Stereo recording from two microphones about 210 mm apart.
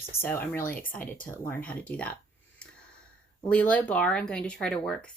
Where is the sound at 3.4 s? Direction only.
5° left (ahead or behind).